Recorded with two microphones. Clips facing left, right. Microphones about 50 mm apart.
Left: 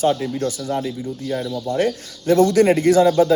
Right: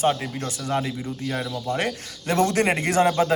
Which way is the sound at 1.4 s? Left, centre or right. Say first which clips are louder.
Left 4 dB; centre.